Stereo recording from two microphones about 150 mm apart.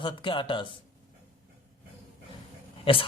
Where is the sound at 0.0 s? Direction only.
35° left (ahead or behind).